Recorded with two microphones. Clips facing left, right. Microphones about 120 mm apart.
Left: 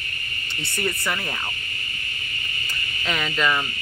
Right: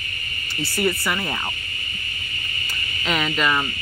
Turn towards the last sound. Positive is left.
turn(degrees=-10)  # may be behind; listen again after turning